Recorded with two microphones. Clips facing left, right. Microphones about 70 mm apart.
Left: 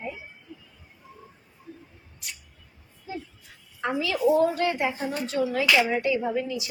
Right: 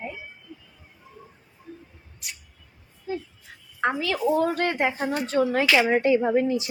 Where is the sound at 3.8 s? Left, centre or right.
Right.